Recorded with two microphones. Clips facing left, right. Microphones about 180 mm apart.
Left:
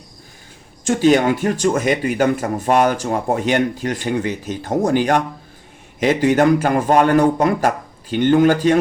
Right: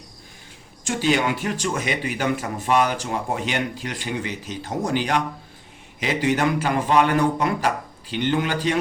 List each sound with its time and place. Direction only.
0.9 s speech: 45° left (ahead or behind)